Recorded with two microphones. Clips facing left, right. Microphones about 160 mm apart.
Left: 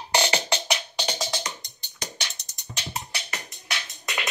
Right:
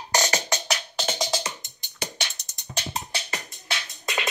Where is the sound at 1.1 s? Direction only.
20° right (ahead or behind).